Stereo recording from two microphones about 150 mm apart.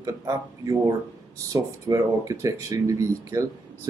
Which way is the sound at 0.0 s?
25° right (ahead or behind).